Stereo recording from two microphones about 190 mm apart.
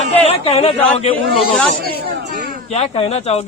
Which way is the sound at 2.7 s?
35° left (ahead or behind).